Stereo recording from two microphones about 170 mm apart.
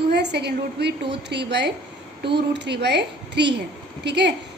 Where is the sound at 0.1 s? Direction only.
75° right (ahead or behind).